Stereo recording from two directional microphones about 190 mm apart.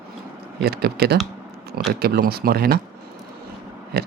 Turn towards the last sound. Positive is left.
turn(degrees=-55)  # may be behind; listen again after turning